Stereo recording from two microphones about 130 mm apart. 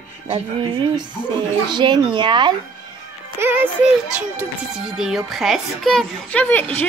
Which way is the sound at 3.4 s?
15° right (ahead or behind).